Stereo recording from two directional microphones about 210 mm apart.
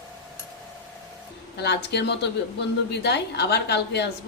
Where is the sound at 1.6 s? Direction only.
55° left (ahead or behind).